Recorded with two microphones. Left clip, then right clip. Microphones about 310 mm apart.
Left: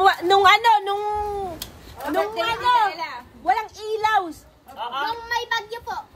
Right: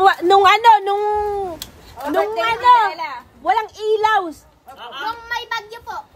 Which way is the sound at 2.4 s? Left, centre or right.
Right.